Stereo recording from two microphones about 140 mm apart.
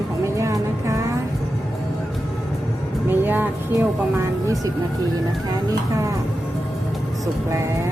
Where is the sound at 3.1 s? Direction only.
15° right (ahead or behind).